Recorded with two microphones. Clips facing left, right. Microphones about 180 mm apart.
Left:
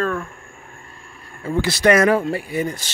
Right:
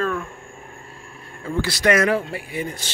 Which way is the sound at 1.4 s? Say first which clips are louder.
Left 3 dB; 10° left (ahead or behind).